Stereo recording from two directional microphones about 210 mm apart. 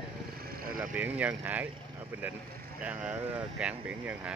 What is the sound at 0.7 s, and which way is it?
Speech, 5° right (ahead or behind).